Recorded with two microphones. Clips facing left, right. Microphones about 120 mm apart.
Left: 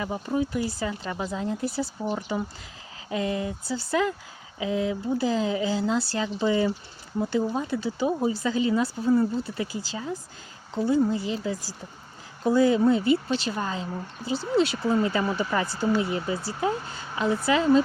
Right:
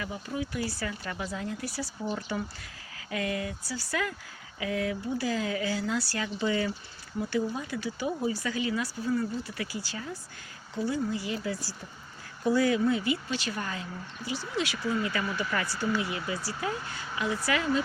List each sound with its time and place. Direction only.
0.1 s speech: 35° left (ahead or behind)
0.5 s speech: 20° left (ahead or behind)